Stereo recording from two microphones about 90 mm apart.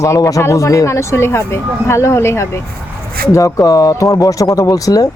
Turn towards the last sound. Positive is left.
turn(degrees=40)  # may be behind; listen again after turning